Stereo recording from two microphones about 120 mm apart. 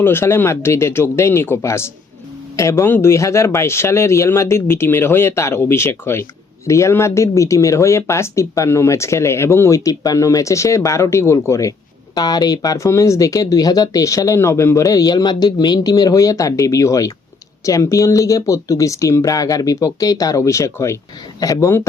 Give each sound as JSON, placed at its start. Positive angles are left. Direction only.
{"t": 0.0, "sound": "speech", "side_deg": 20}